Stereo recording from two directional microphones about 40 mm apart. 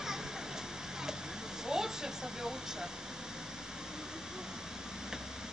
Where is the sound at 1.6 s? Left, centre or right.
Centre.